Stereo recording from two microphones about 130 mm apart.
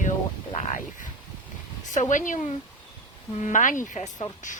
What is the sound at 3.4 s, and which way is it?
Speech, 80° left.